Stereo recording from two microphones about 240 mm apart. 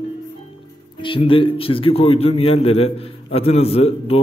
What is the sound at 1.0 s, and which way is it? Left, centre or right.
A man's voice, left.